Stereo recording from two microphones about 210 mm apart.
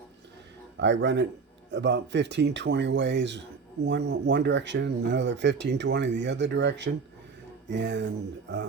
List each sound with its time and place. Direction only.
0.8 s speech: 60° right (ahead or behind)